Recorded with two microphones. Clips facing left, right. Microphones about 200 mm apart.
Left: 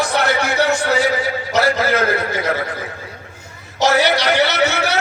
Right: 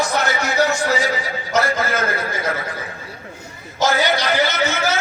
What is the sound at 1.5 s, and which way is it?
A man's voice, 70° left (ahead or behind).